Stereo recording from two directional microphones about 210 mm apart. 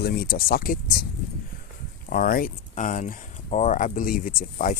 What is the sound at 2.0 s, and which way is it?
Speech, 40° left (ahead or behind).